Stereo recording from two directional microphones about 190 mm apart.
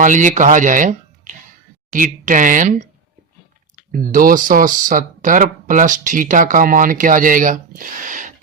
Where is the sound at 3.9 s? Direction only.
45° right (ahead or behind).